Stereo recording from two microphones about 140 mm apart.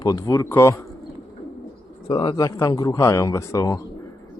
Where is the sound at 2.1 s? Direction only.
30° left (ahead or behind).